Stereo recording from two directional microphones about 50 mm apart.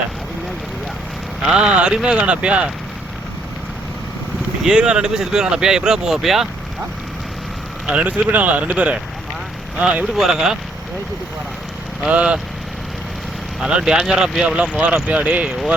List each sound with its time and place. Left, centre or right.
1.5 s speech: centre
4.6 s speech: centre
7.9 s speech: right
10.2 s speech: centre
12.0 s speech: right
13.6 s speech: centre
15.4 s speech: centre